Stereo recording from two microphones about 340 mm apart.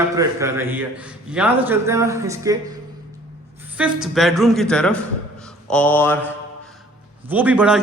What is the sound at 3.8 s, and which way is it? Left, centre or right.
A man's voice, centre.